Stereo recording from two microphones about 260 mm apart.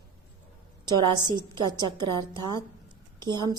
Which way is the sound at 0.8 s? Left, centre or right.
Centre.